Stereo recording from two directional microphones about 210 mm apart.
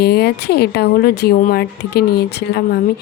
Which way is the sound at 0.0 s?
50° left (ahead or behind).